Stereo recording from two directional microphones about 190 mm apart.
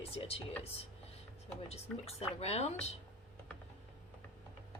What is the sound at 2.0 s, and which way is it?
Speech, 30° left (ahead or behind).